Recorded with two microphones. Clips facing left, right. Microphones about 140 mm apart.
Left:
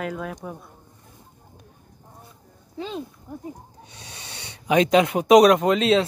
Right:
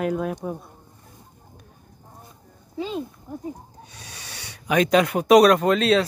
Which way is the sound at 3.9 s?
25° left (ahead or behind).